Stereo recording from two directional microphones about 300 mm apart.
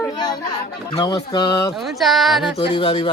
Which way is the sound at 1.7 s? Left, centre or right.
Centre.